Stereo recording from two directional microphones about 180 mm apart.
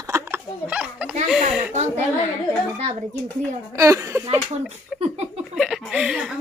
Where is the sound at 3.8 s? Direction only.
15° right (ahead or behind).